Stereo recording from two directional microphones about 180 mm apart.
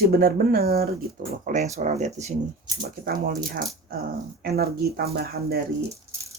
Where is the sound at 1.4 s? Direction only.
40° right (ahead or behind).